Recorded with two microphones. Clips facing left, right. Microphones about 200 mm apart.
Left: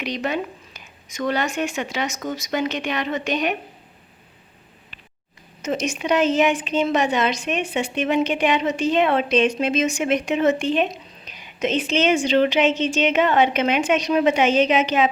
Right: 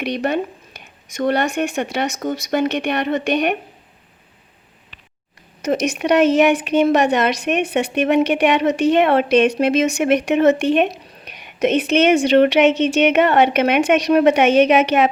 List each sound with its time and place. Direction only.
0.0 s a woman's voice: 60° right (ahead or behind)
5.6 s a woman's voice: 65° right (ahead or behind)